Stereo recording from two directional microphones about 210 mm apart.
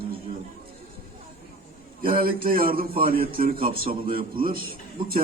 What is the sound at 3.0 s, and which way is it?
A man's voice, 25° right (ahead or behind).